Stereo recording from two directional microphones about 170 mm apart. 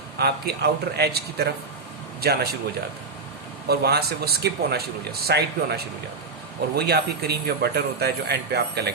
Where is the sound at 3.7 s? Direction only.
70° right (ahead or behind).